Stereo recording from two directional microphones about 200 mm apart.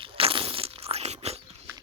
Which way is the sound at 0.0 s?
25° right (ahead or behind).